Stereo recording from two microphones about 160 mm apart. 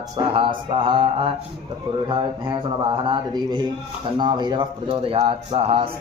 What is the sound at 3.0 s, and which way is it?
Speech, 25° right (ahead or behind).